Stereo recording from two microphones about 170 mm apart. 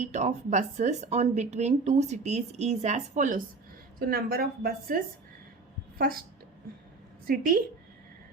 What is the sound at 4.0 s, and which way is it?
A woman's voice, 65° right (ahead or behind).